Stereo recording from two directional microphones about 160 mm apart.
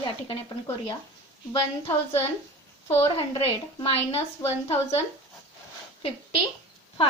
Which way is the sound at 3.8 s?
35° left (ahead or behind).